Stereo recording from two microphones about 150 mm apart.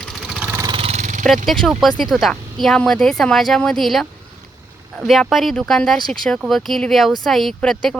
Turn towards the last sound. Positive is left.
turn(degrees=5)  # may be behind; listen again after turning